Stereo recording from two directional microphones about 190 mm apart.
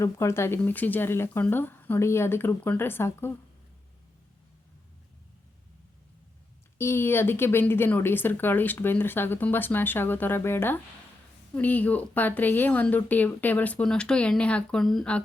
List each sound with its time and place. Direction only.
0.0 s speech: 15° left (ahead or behind)
6.7 s speech: 15° left (ahead or behind)